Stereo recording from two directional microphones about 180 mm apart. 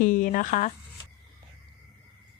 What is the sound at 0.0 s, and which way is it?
Speech, 50° left (ahead or behind).